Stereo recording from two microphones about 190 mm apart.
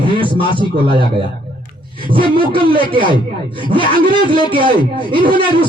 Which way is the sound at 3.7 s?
50° right (ahead or behind).